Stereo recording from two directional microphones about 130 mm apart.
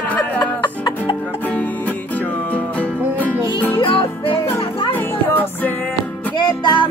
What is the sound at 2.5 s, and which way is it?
Music, 10° left (ahead or behind).